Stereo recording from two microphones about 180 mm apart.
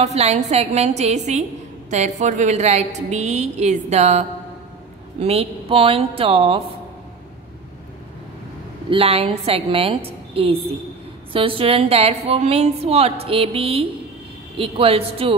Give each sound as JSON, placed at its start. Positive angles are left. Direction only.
{"t": 0.0, "sound": "a woman's voice", "side_deg": -35}
{"t": 8.9, "sound": "a woman's voice", "side_deg": -35}